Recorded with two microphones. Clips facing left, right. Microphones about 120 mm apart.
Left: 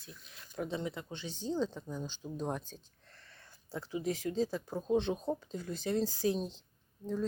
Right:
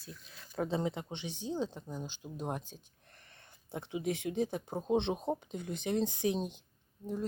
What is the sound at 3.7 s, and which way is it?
Speech, 20° right (ahead or behind).